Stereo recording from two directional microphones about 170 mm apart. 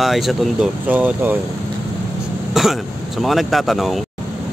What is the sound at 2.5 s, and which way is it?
Speech, centre (ahead or behind).